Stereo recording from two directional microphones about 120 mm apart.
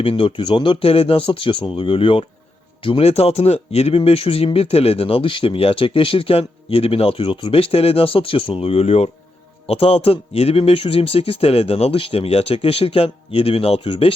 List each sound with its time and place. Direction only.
0.0 s speech: 50° left (ahead or behind)